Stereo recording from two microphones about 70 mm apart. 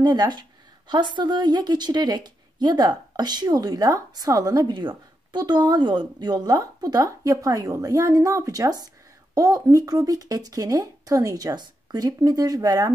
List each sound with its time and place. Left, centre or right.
0.0 s speech: right